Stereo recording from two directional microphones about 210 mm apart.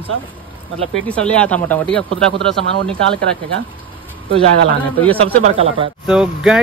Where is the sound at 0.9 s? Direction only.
5° left (ahead or behind).